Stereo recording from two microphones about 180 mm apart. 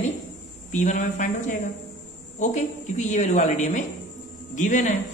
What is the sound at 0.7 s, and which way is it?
A woman's voice, 40° left (ahead or behind).